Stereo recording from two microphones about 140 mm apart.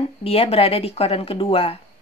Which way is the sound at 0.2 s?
45° left (ahead or behind).